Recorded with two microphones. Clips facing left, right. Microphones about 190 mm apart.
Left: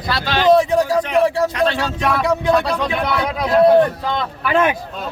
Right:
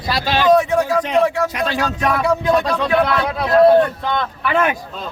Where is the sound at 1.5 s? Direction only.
10° right (ahead or behind).